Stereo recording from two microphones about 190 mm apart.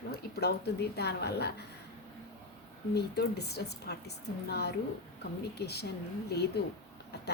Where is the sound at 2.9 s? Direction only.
60° left (ahead or behind).